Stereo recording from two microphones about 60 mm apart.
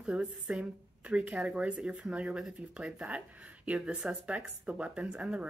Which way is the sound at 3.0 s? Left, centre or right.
Right.